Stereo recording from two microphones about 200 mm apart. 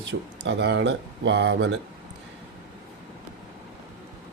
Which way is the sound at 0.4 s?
60° right (ahead or behind).